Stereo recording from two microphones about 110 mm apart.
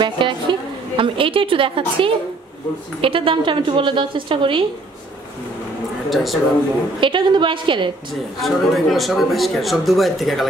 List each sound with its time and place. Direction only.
0.0 s a woman's voice: 45° right (ahead or behind)
6.0 s speech: centre (ahead or behind)
7.0 s a woman's voice: 50° right (ahead or behind)
8.4 s speech: centre (ahead or behind)